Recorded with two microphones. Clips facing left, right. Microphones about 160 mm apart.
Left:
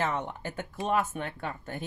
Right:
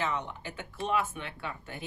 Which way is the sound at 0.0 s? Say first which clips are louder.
Left 3 dB; 50° left (ahead or behind).